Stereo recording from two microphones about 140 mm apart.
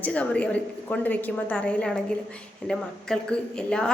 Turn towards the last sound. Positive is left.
turn(degrees=5)  # may be behind; listen again after turning